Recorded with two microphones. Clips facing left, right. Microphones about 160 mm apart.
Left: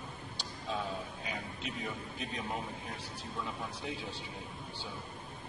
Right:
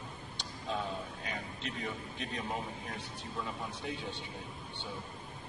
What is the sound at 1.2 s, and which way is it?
Speech, 5° left (ahead or behind).